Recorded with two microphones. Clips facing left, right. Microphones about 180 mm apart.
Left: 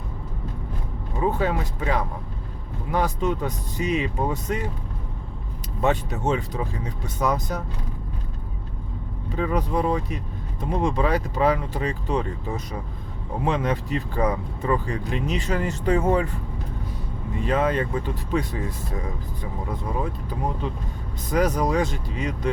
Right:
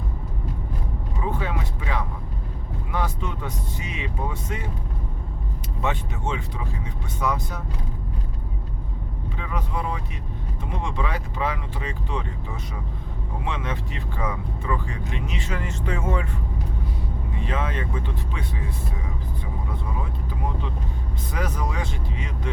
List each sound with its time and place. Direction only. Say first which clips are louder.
1.2 s speech: left 6 dB; 40° left (ahead or behind)
5.8 s speech: left 5 dB; 40° left (ahead or behind)
9.3 s speech: left 8 dB; 40° left (ahead or behind)
17.4 s speech: left 7 dB; 40° left (ahead or behind)
21.2 s speech: left 8 dB; 40° left (ahead or behind)